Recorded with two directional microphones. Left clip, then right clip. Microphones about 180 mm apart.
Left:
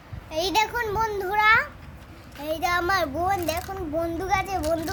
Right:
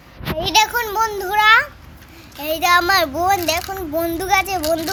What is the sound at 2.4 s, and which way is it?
Speech, 15° right (ahead or behind).